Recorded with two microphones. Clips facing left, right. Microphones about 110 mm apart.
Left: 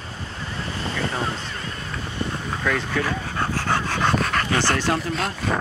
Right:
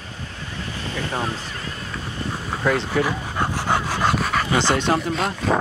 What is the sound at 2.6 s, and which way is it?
Speech, 20° right (ahead or behind).